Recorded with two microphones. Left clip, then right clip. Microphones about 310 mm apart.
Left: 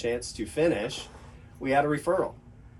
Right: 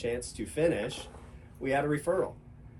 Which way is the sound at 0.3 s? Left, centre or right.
Centre.